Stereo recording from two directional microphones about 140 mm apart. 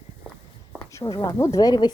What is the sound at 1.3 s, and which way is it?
Speech, 20° left (ahead or behind).